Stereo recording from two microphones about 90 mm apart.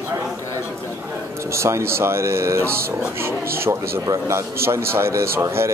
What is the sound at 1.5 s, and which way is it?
Speech, 30° right (ahead or behind).